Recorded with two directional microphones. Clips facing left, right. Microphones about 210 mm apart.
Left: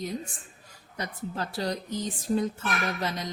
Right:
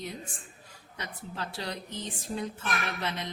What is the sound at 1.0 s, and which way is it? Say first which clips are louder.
Speech: left 5 dB; 40° left (ahead or behind).